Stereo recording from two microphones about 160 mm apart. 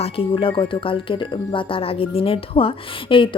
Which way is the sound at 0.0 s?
35° left (ahead or behind).